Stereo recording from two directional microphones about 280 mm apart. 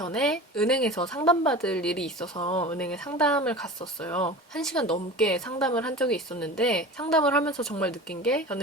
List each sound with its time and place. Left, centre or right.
0.1 s speech: centre
2.4 s speech: left
2.6 s speech: centre